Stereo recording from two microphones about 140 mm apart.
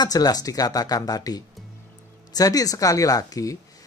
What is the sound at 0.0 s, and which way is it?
Speech, 25° left (ahead or behind).